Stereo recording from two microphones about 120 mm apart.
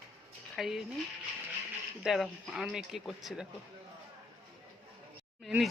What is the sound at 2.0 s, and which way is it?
Speech, 5° right (ahead or behind).